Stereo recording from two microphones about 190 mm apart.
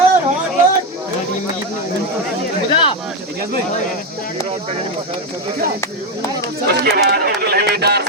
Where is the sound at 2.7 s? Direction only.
30° left (ahead or behind).